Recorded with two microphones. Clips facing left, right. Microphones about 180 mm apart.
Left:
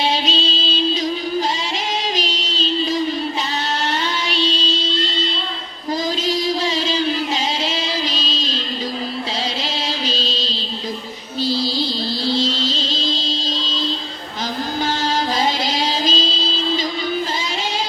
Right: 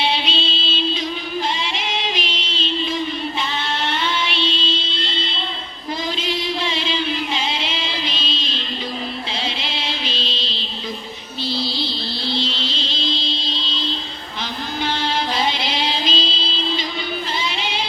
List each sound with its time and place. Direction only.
0.0 s music: 40° left (ahead or behind)
1.9 s music: 40° left (ahead or behind)
6.2 s a sound: 40° left (ahead or behind)
9.6 s music: 40° left (ahead or behind)
15.6 s music: 45° left (ahead or behind)